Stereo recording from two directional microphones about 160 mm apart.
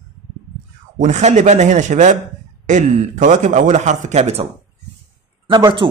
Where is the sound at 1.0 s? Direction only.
45° right (ahead or behind).